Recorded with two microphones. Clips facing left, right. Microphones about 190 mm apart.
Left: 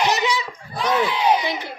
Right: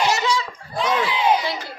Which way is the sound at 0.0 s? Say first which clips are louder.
Even; 20° left (ahead or behind).